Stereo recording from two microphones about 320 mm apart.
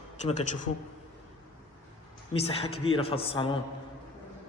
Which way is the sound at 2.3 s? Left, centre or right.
Centre.